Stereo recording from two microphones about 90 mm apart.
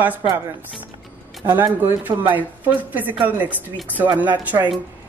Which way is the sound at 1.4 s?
20° right (ahead or behind).